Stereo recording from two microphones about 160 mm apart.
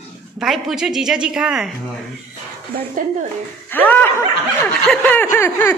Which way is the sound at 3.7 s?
10° left (ahead or behind).